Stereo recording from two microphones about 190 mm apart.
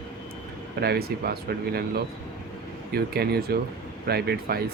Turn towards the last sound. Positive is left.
turn(degrees=-55)  # may be behind; listen again after turning